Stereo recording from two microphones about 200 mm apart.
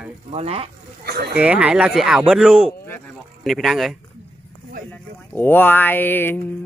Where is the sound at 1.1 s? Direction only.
50° right (ahead or behind).